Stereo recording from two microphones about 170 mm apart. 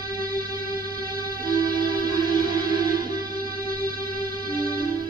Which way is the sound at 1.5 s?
60° right (ahead or behind).